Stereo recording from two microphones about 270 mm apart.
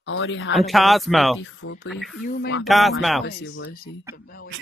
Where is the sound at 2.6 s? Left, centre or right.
Centre.